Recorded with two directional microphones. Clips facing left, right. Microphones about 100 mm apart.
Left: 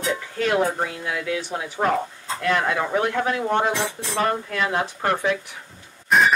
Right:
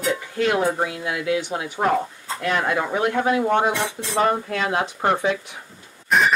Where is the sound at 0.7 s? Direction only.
15° right (ahead or behind).